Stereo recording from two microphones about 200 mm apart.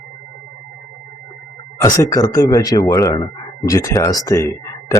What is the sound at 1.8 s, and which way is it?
A man's voice, 15° left (ahead or behind).